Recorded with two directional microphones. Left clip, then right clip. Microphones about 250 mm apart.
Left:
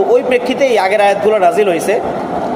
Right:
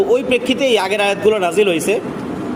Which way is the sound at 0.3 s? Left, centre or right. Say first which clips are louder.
Left 3 dB; right.